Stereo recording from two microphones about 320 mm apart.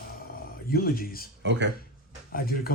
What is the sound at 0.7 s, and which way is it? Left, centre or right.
Speech, left.